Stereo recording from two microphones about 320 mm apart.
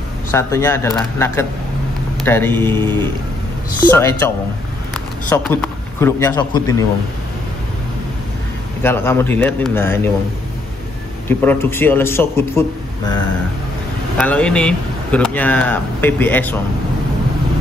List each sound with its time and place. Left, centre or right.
0.3 s a man's voice: centre
2.7 s speech: centre
3.9 s a man's voice: centre
5.3 s a man's voice: centre
8.8 s a man's voice: centre
11.2 s a man's voice: centre
14.1 s speech: centre